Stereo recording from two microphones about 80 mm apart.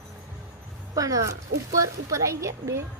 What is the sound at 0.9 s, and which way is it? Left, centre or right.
Speech, right.